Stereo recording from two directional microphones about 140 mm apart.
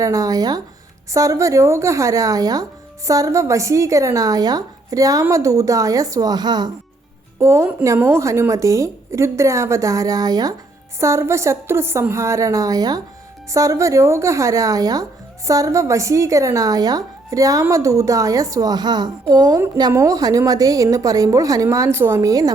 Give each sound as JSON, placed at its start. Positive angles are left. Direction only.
{"t": 0.0, "sound": "speech", "side_deg": -25}
{"t": 7.3, "sound": "speech", "side_deg": -20}